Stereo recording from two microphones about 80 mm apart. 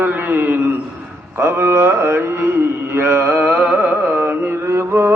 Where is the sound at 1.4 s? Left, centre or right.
Right; by 4.3 s centre.